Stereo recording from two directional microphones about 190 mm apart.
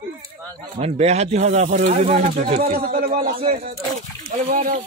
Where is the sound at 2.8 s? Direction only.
50° right (ahead or behind).